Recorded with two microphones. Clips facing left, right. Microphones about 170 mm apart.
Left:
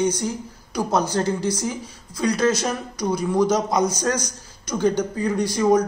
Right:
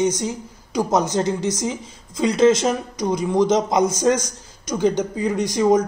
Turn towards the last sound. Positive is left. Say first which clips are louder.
# right 1 dB
turn(degrees=-20)  # may be behind; listen again after turning